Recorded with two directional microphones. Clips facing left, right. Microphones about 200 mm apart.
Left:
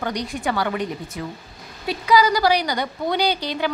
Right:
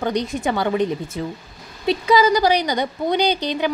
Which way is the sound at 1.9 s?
25° right (ahead or behind).